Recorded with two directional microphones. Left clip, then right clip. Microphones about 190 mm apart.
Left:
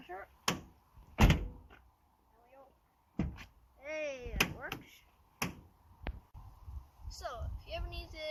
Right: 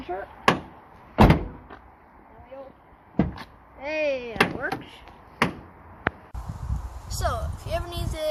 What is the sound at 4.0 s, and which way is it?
Speech, 50° right (ahead or behind).